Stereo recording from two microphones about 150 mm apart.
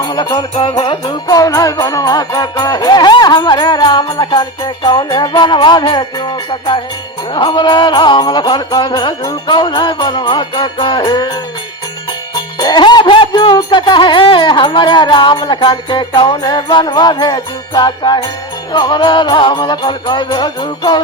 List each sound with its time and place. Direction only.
0.0 s music: 30° left (ahead or behind)